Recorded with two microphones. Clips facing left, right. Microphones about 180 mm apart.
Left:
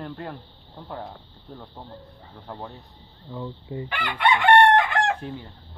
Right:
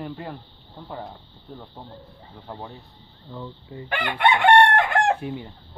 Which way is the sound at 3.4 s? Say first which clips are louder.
Left 4 dB; 25° left (ahead or behind).